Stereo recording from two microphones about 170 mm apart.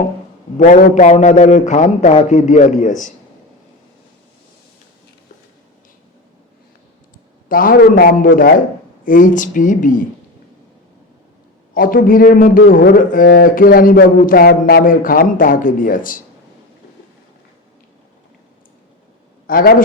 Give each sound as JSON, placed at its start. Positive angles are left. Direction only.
{"t": 0.5, "sound": "a man's voice", "side_deg": 50}
{"t": 7.4, "sound": "a man's voice", "side_deg": 55}
{"t": 11.7, "sound": "speech", "side_deg": 55}
{"t": 19.5, "sound": "a man's voice", "side_deg": 60}